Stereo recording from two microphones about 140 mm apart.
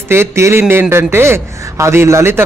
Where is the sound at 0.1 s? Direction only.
20° right (ahead or behind).